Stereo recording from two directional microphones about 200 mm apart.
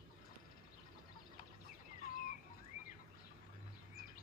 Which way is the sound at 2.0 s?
45° left (ahead or behind).